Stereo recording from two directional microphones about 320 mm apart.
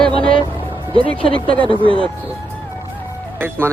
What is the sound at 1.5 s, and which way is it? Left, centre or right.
Speech, centre.